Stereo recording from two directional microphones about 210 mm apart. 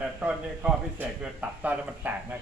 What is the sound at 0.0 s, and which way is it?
A man's voice, 5° right (ahead or behind).